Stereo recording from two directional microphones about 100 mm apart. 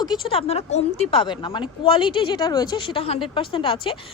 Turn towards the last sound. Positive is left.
turn(degrees=60)  # may be behind; listen again after turning